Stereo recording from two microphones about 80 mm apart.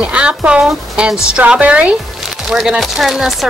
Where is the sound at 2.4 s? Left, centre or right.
Centre.